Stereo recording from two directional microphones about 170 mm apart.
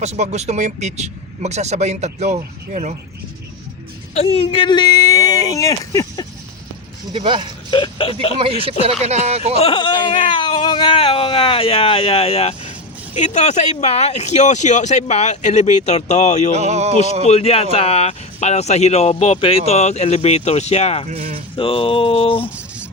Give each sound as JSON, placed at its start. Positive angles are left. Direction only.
{"t": 0.0, "sound": "speech", "side_deg": -40}
{"t": 4.1, "sound": "speech", "side_deg": 35}
{"t": 7.3, "sound": "speech", "side_deg": -30}
{"t": 7.7, "sound": "speech", "side_deg": 30}
{"t": 8.4, "sound": "speech", "side_deg": -35}
{"t": 9.6, "sound": "speech", "side_deg": 30}
{"t": 16.6, "sound": "speech", "side_deg": -40}
{"t": 17.2, "sound": "speech", "side_deg": 35}
{"t": 21.1, "sound": "speech", "side_deg": -35}
{"t": 21.5, "sound": "speech", "side_deg": 30}
{"t": 22.4, "sound": "music", "side_deg": -10}